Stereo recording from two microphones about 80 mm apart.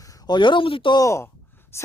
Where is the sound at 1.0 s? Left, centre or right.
Left.